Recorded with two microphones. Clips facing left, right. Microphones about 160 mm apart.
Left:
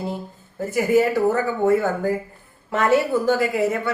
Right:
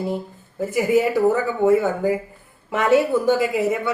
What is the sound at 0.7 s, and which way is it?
A woman's voice, 15° right (ahead or behind).